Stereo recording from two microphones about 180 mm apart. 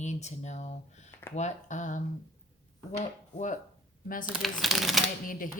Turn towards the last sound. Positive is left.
turn(degrees=50)  # may be behind; listen again after turning